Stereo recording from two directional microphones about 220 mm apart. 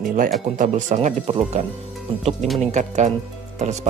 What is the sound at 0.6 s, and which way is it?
Speech, 35° right (ahead or behind).